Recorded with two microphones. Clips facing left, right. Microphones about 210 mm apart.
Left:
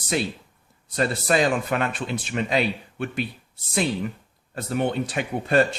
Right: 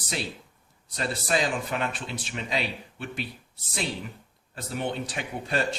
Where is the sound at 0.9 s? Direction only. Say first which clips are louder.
Left 6 dB; 55° left (ahead or behind).